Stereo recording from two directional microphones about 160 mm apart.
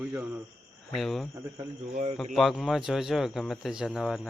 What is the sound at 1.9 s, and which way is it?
Speech, 45° right (ahead or behind).